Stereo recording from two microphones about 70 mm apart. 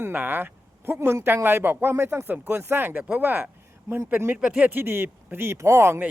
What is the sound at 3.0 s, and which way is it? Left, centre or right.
Speech, centre.